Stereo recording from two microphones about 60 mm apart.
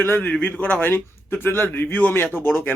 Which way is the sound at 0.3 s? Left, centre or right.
Left.